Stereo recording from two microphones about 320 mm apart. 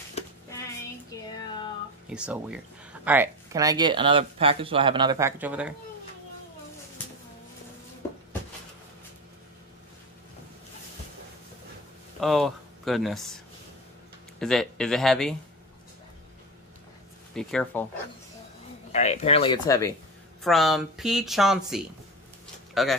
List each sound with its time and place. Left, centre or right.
1.1 s a sound: centre
2.0 s speech: centre
12.2 s speech: centre
14.4 s speech: centre
17.3 s speech: centre
18.9 s speech: centre
20.4 s speech: centre